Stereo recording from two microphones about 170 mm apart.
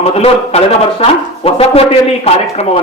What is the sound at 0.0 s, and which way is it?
A man's voice, 40° left (ahead or behind).